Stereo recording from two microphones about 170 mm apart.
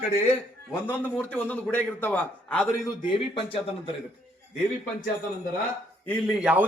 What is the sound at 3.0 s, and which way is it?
Speech, 30° left (ahead or behind).